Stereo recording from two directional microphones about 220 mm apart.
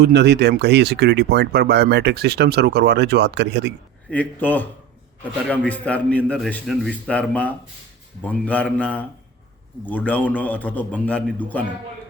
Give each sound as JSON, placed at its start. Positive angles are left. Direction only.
{"t": 0.0, "sound": "speech", "side_deg": -50}
{"t": 4.1, "sound": "a man's voice", "side_deg": 5}